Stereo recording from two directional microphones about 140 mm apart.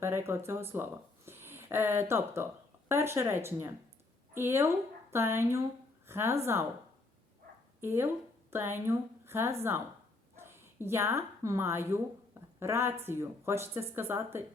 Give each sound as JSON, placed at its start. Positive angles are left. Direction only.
{"t": 0.0, "sound": "speech", "side_deg": -20}
{"t": 7.8, "sound": "a woman's voice", "side_deg": -15}
{"t": 10.3, "sound": "dog", "side_deg": -15}
{"t": 10.8, "sound": "a woman's voice", "side_deg": -20}